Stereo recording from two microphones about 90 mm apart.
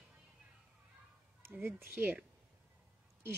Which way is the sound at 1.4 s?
20° right (ahead or behind).